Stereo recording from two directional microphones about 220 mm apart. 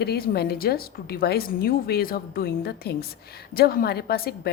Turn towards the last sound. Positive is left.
turn(degrees=45)  # may be behind; listen again after turning